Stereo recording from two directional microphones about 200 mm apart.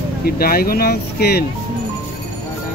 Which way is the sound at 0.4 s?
50° left (ahead or behind).